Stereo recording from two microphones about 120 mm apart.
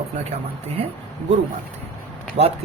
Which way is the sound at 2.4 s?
60° right (ahead or behind).